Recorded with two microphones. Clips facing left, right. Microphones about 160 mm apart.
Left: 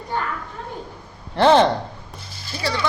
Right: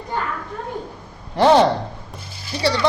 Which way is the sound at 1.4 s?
10° right (ahead or behind).